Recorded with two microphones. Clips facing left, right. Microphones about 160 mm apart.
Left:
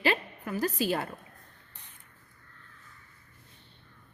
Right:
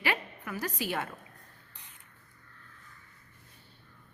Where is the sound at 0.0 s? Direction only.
30° left (ahead or behind).